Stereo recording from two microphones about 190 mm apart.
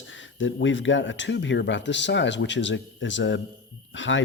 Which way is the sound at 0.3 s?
80° left.